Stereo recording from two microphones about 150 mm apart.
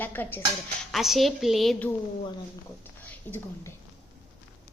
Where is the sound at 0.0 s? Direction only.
10° left (ahead or behind).